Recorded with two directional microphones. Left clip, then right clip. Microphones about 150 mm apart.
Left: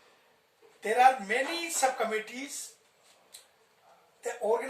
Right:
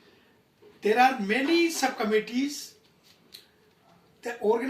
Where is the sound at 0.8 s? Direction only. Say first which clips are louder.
Right 1 dB; 20° left (ahead or behind).